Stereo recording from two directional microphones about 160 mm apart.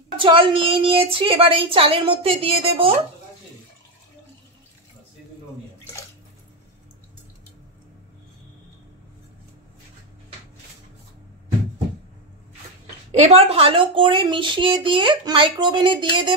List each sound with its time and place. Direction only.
0.2 s speech: 30° right (ahead or behind)
13.1 s speech: 40° right (ahead or behind)